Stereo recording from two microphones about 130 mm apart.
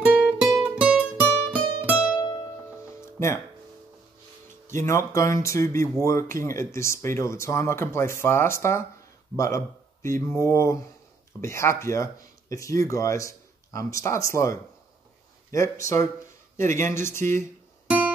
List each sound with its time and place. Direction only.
0.0 s music: 10° right (ahead or behind)
3.0 s music: 20° left (ahead or behind)
4.6 s speech: 20° left (ahead or behind)
10.0 s speech: 20° left (ahead or behind)
17.8 s music: 10° right (ahead or behind)